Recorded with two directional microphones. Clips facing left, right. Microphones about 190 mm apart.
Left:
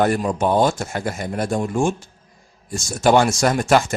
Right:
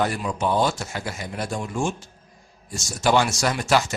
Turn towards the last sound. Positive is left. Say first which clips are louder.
# left 5 dB
turn(degrees=50)  # may be behind; listen again after turning